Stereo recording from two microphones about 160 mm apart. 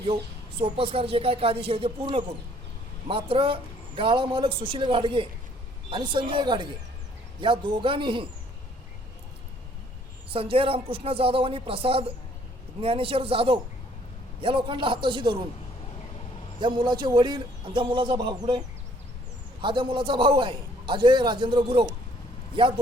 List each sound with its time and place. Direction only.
0.6 s a man's voice: 35° right (ahead or behind)
10.2 s a man's voice: 35° right (ahead or behind)
16.6 s a man's voice: 30° right (ahead or behind)
19.6 s a man's voice: 30° right (ahead or behind)